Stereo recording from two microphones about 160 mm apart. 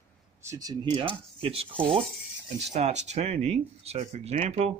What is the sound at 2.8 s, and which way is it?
Speech, 45° right (ahead or behind).